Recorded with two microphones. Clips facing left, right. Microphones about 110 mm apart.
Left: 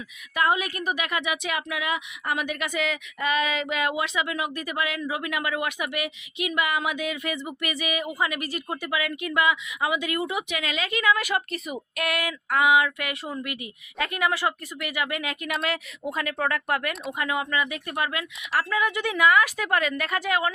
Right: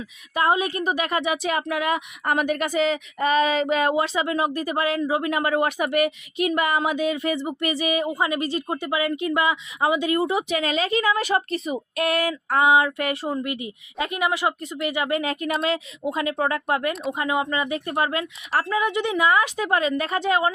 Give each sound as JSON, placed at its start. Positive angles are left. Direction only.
{"t": 0.3, "sound": "speech", "side_deg": -30}